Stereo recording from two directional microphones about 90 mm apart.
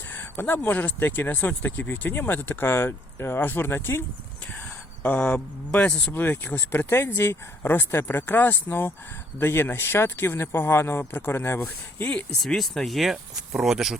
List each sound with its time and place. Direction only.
0.1 s speech: 20° left (ahead or behind)
5.0 s speech: 15° left (ahead or behind)
11.9 s speech: 15° left (ahead or behind)
12.4 s speech: 5° left (ahead or behind)